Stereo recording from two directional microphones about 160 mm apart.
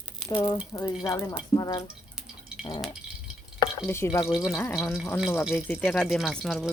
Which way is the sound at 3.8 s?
15° left (ahead or behind).